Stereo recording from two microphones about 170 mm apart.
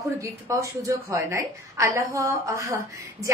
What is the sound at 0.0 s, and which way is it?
A woman's voice, 20° right (ahead or behind).